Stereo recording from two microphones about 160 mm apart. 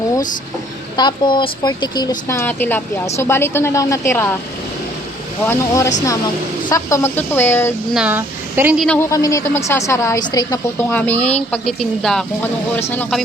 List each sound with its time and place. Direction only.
0.9 s a woman's voice: 30° left (ahead or behind)
2.2 s speech: 15° left (ahead or behind)
5.5 s speech: 15° left (ahead or behind)
7.9 s speech: 10° right (ahead or behind)
8.8 s speech: 10° left (ahead or behind)
9.0 s a woman's voice: 20° left (ahead or behind)
10.8 s speech: 10° left (ahead or behind)